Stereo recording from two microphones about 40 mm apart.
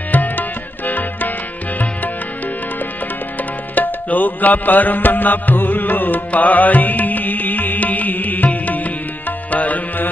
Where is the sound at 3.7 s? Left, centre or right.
Left.